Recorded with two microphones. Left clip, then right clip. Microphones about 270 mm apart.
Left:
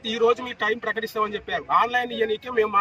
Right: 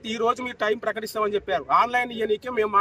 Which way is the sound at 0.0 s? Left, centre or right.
Centre.